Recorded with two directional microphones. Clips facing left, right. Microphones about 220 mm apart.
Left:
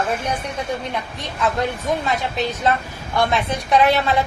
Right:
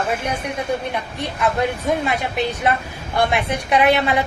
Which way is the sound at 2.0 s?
15° right (ahead or behind).